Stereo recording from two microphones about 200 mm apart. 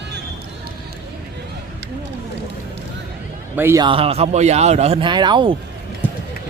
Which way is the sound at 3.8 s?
30° right (ahead or behind).